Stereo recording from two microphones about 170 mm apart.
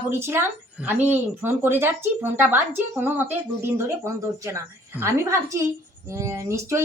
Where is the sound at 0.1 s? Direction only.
15° right (ahead or behind).